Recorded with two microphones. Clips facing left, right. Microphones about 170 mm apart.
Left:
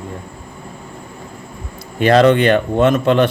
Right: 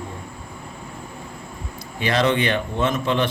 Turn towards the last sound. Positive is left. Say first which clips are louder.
# left 8 dB
turn(degrees=60)  # may be behind; listen again after turning